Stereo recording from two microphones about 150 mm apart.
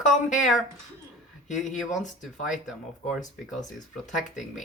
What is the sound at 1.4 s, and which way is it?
Speech, 55° left (ahead or behind).